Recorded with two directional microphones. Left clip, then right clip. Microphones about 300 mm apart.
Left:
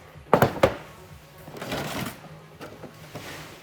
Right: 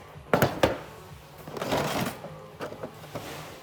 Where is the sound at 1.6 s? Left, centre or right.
Centre.